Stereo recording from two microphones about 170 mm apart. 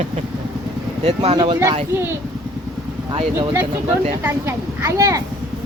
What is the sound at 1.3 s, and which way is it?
Speech, 25° right (ahead or behind).